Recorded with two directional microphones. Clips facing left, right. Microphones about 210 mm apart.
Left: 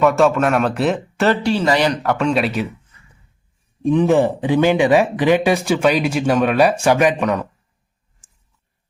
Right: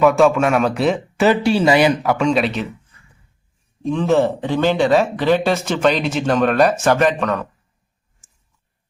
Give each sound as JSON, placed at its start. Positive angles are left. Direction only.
{"t": 0.0, "sound": "speech", "side_deg": 0}
{"t": 3.8, "sound": "speech", "side_deg": 15}